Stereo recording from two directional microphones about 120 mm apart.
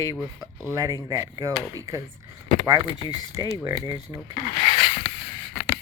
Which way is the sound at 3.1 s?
35° right (ahead or behind).